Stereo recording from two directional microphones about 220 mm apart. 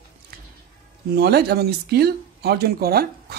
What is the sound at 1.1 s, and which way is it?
Speech, 45° right (ahead or behind).